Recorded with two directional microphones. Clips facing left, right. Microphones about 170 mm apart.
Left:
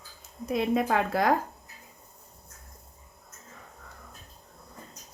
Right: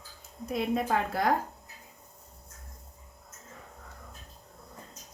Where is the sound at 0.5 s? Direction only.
90° left.